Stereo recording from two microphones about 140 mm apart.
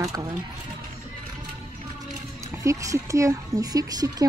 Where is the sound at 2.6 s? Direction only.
20° right (ahead or behind).